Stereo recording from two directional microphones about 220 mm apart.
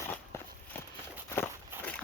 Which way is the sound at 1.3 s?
10° left (ahead or behind).